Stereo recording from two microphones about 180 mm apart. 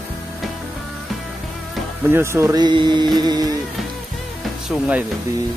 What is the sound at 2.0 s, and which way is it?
Speech, 15° right (ahead or behind).